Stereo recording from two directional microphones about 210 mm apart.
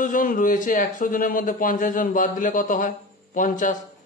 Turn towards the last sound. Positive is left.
turn(degrees=40)  # may be behind; listen again after turning